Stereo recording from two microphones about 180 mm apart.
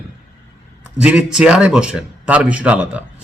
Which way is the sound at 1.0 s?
5° right (ahead or behind).